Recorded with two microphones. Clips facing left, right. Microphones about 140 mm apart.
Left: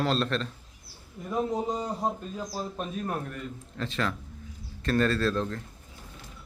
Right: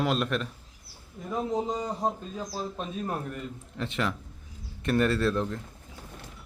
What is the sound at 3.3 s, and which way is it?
Speech, 20° right (ahead or behind).